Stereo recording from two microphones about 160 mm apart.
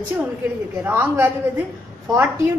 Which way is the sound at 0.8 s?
15° right (ahead or behind).